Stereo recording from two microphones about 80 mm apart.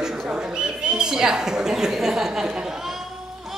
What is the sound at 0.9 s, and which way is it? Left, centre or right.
A woman's voice, centre.